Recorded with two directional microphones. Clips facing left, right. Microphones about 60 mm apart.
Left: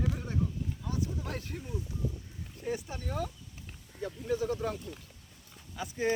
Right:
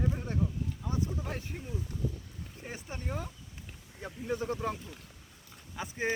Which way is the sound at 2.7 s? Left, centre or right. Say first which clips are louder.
Even; right.